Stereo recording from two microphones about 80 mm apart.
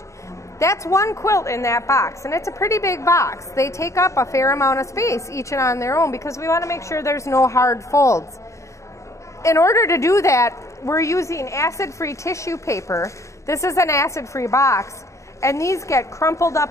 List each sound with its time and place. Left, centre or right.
0.6 s a woman's voice: left
9.4 s a woman's voice: left